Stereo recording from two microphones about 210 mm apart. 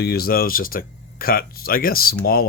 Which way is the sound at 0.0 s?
45° left (ahead or behind).